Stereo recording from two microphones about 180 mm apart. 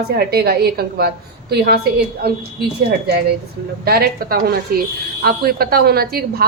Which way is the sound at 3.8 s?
60° right (ahead or behind).